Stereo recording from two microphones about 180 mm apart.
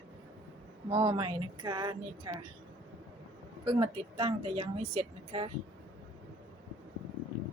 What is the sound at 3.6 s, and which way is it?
A woman's voice, 30° right (ahead or behind).